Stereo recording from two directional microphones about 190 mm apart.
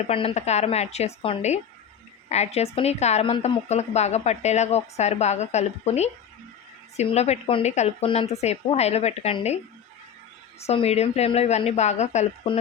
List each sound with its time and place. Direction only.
0.1 s a woman's voice: 30° left (ahead or behind)
10.6 s a woman's voice: 35° left (ahead or behind)